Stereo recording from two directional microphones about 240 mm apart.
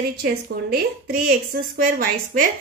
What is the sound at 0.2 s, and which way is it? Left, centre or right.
A woman's voice, right.